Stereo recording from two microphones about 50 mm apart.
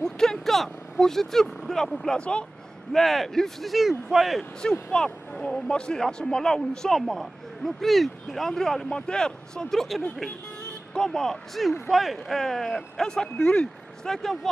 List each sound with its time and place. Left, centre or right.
0.0 s vehicle: centre
2.1 s speech: centre
2.9 s speech: centre
4.4 s speech: centre